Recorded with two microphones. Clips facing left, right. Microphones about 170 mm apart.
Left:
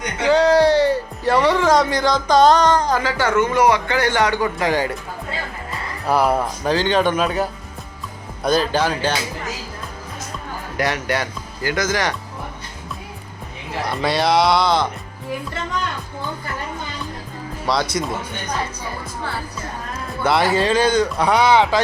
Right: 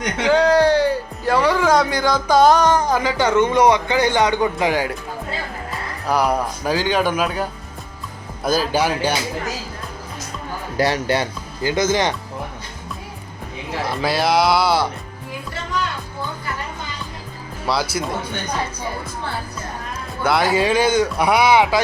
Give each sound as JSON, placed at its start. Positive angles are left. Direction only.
{"t": 0.3, "sound": "speech", "side_deg": 0}
{"t": 6.1, "sound": "speech", "side_deg": 5}
{"t": 10.8, "sound": "speech", "side_deg": -30}
{"t": 13.8, "sound": "speech", "side_deg": 0}
{"t": 17.7, "sound": "speech", "side_deg": -5}
{"t": 20.2, "sound": "speech", "side_deg": 0}